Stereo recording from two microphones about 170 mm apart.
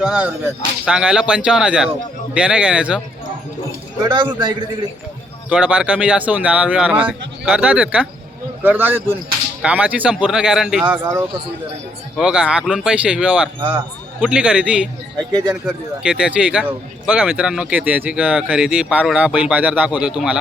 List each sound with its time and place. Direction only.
0.0 s speech: 5° right (ahead or behind)
4.1 s a man's voice: 25° right (ahead or behind)
5.5 s speech: 10° right (ahead or behind)
13.6 s a man's voice: 30° right (ahead or behind)
14.2 s speech: 5° right (ahead or behind)
15.3 s a man's voice: 20° right (ahead or behind)
15.6 s speech: 5° right (ahead or behind)